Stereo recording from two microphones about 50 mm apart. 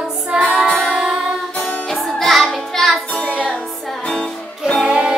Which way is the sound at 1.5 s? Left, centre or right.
Left.